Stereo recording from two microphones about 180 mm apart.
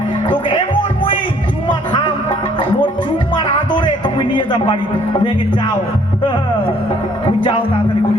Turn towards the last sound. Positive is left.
turn(degrees=25)  # may be behind; listen again after turning